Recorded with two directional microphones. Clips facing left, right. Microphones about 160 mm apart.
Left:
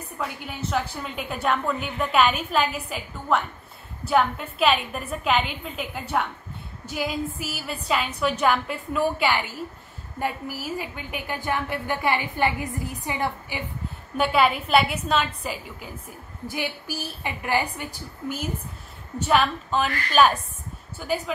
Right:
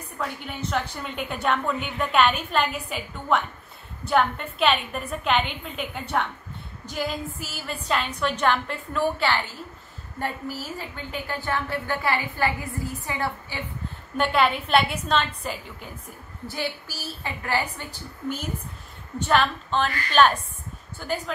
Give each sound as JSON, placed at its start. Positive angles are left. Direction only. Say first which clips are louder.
{"t": 0.2, "sound": "a woman's voice", "louder": "even", "side_deg": 5}
{"t": 14.1, "sound": "a woman's voice", "louder": "left 1 dB", "side_deg": 5}
{"t": 16.4, "sound": "a woman's voice", "louder": "left 1 dB", "side_deg": 15}
{"t": 19.1, "sound": "a woman's voice", "louder": "left 1 dB", "side_deg": 5}